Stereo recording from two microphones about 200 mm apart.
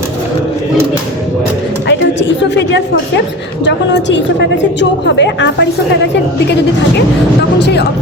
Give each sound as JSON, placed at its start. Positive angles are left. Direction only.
{"t": 1.9, "sound": "a sound", "side_deg": 60}
{"t": 3.6, "sound": "a woman's voice", "side_deg": 60}
{"t": 7.6, "sound": "a woman's voice", "side_deg": 55}